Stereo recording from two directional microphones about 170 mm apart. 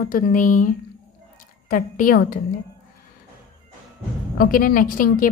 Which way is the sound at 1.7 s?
55° left (ahead or behind).